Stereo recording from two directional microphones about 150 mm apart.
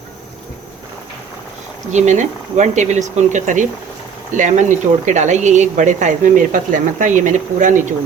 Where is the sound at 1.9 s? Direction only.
50° right (ahead or behind).